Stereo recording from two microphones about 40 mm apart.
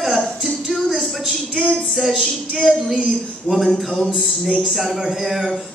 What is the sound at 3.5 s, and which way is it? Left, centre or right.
Speech, centre.